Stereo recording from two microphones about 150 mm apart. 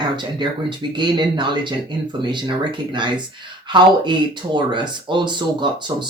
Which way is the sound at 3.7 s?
30° right (ahead or behind).